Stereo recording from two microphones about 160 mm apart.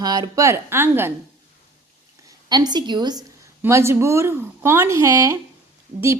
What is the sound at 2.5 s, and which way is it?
A woman's voice, 25° right (ahead or behind).